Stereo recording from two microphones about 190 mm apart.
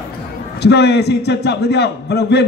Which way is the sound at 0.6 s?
60° left (ahead or behind).